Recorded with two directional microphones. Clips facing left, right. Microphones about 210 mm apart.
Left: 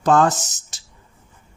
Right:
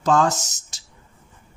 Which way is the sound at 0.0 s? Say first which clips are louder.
Left 3 dB; 55° left (ahead or behind).